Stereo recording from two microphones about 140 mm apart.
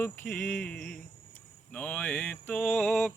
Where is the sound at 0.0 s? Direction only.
15° left (ahead or behind).